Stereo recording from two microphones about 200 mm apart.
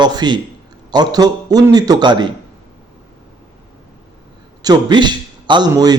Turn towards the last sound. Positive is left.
turn(degrees=-20)  # may be behind; listen again after turning